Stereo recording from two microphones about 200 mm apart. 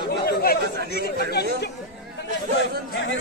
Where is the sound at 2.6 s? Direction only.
65° left (ahead or behind).